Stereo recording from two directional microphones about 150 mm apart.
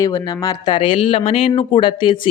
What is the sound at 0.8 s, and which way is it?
Speech, 35° left (ahead or behind).